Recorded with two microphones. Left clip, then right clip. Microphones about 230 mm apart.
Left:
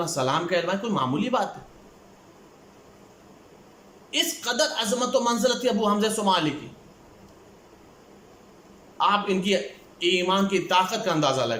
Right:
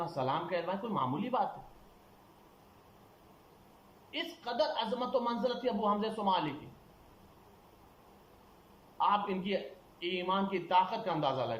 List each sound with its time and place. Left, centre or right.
0.0 s a man's voice: left
4.1 s a man's voice: left
9.0 s a man's voice: left